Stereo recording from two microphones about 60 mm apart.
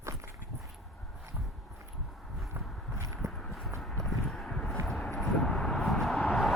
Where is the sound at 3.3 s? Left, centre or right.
Centre.